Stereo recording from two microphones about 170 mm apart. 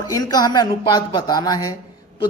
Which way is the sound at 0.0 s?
20° left (ahead or behind).